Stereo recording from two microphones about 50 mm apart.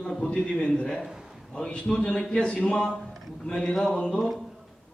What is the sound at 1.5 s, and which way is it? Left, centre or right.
A man's voice, left.